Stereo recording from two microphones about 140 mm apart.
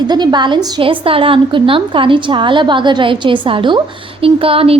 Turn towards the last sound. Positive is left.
turn(degrees=-45)  # may be behind; listen again after turning